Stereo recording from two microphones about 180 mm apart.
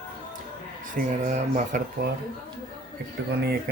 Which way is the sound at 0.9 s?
45° right (ahead or behind).